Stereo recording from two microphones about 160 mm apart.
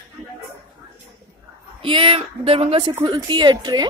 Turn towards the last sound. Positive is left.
turn(degrees=-25)  # may be behind; listen again after turning